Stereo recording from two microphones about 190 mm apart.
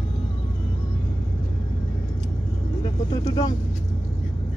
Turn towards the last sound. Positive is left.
turn(degrees=20)  # may be behind; listen again after turning